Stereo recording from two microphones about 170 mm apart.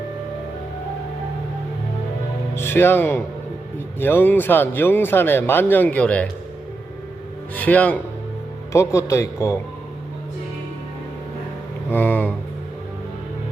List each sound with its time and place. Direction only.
2.6 s speech: 15° left (ahead or behind)
7.5 s speech: 10° left (ahead or behind)
11.9 s speech: 10° left (ahead or behind)